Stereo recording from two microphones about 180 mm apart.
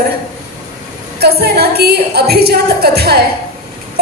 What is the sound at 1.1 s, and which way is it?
A woman's voice, 60° right (ahead or behind).